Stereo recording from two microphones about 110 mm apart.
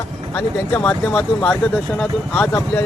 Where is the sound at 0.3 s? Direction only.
20° left (ahead or behind).